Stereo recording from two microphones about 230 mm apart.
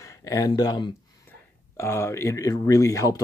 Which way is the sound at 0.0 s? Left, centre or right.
Centre.